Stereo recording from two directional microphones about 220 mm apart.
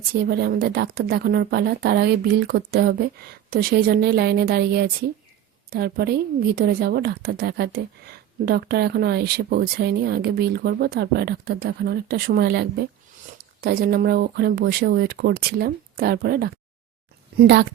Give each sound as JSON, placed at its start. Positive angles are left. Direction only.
{"t": 0.1, "sound": "a woman's voice", "side_deg": -45}